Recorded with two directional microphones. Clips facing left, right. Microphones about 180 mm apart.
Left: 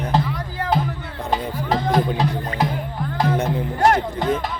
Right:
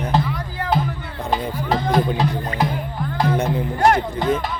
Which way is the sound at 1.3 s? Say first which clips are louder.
Right 1 dB; 40° left (ahead or behind).